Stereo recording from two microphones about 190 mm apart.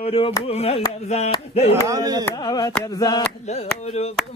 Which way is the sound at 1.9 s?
20° right (ahead or behind).